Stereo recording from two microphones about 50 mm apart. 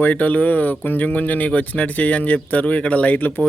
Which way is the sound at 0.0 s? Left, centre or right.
Left.